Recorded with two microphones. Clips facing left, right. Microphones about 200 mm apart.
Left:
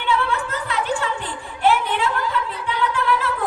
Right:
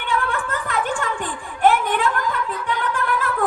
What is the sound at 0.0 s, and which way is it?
Music, 50° right (ahead or behind).